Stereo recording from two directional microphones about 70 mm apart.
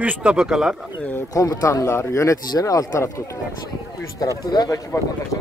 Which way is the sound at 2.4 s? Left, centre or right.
Left.